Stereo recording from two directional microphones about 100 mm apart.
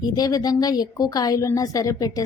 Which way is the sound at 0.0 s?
40° left (ahead or behind).